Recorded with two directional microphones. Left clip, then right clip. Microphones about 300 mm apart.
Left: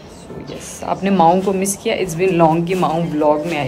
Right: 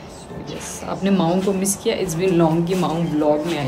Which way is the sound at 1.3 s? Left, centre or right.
Centre.